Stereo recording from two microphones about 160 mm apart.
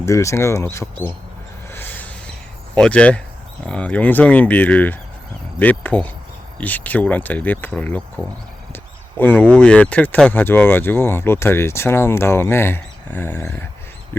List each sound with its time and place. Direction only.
0.0 s speech: 20° left (ahead or behind)
1.7 s a sound: 10° left (ahead or behind)
2.7 s speech: 5° left (ahead or behind)